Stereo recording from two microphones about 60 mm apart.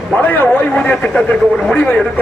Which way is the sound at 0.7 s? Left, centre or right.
Centre.